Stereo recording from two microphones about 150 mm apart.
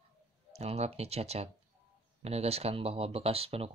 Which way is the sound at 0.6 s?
45° right (ahead or behind).